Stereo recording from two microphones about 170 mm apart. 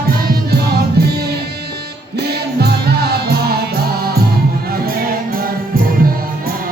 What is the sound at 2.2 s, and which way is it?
Music, 70° right (ahead or behind).